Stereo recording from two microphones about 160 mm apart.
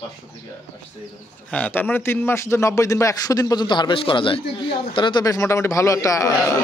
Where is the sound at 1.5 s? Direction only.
10° left (ahead or behind).